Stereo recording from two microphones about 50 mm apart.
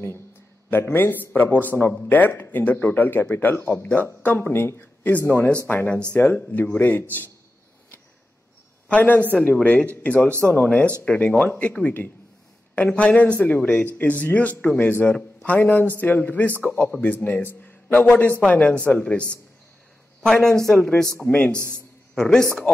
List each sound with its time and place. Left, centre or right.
0.7 s speech: left
4.5 s speech: left
5.2 s speech: left
6.1 s speech: left
6.5 s speech: left
8.8 s a man's voice: left
9.3 s a man's voice: left
20.7 s speech: left
22.1 s a man's voice: centre